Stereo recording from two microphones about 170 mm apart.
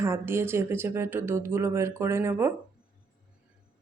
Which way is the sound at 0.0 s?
15° right (ahead or behind).